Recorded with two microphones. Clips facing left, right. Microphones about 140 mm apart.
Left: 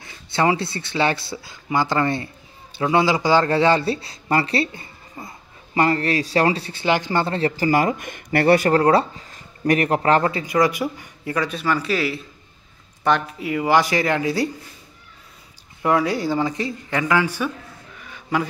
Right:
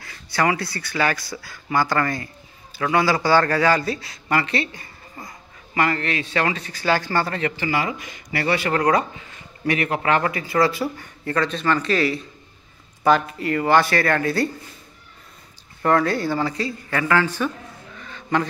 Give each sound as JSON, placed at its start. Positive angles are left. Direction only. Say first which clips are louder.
{"t": 0.0, "sound": "speech", "louder": "left 2 dB", "side_deg": 25}
{"t": 5.8, "sound": "speech", "louder": "left 3 dB", "side_deg": 35}
{"t": 10.4, "sound": "speech", "louder": "left 1 dB", "side_deg": 15}
{"t": 15.8, "sound": "speech", "louder": "even", "side_deg": 10}
{"t": 17.9, "sound": "a sound", "louder": "right 1 dB", "side_deg": 10}